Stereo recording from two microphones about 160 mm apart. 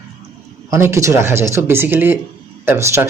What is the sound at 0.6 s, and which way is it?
Speech, 15° right (ahead or behind).